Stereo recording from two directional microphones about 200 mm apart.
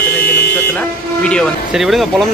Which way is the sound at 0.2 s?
50° left (ahead or behind).